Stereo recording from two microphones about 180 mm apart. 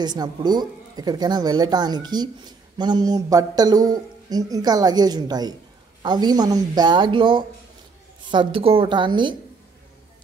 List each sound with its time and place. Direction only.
0.0 s a man's voice: 25° right (ahead or behind)